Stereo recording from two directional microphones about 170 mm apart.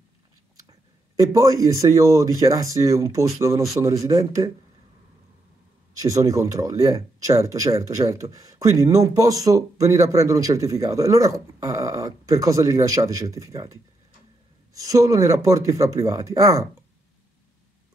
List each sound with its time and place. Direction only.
0.7 s speech: 20° right (ahead or behind)
5.9 s speech: 20° right (ahead or behind)